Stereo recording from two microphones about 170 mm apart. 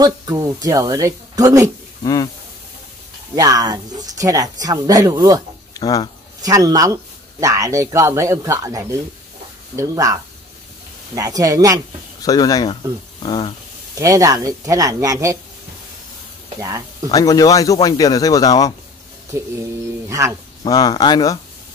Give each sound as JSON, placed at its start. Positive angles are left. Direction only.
{"t": 0.0, "sound": "speech", "side_deg": -20}
{"t": 3.3, "sound": "speech", "side_deg": -20}
{"t": 5.8, "sound": "speech", "side_deg": 20}
{"t": 6.4, "sound": "speech", "side_deg": -20}
{"t": 12.2, "sound": "speech", "side_deg": 20}
{"t": 13.9, "sound": "speech", "side_deg": -20}
{"t": 16.5, "sound": "speech", "side_deg": -20}
{"t": 17.1, "sound": "speech", "side_deg": 20}
{"t": 20.1, "sound": "speech", "side_deg": -15}
{"t": 20.6, "sound": "speech", "side_deg": 25}